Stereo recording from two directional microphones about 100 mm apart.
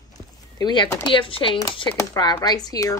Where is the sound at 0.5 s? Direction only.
45° left (ahead or behind).